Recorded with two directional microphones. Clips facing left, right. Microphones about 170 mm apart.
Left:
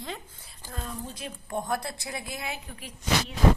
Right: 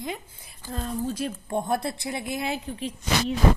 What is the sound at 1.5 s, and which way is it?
Speech, 25° right (ahead or behind).